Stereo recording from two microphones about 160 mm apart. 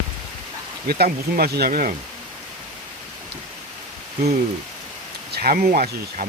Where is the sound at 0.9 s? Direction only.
70° right (ahead or behind).